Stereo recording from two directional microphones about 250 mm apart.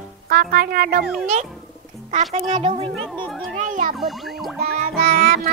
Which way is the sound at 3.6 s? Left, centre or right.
Right.